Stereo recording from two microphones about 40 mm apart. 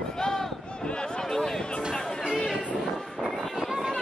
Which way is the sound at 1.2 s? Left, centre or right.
Centre.